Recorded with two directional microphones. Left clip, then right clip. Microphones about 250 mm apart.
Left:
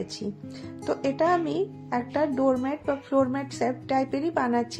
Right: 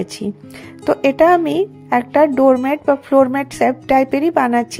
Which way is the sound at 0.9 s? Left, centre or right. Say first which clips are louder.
Right 12 dB; right.